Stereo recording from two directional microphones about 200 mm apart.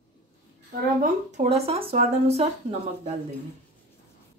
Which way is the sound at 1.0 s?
35° right (ahead or behind).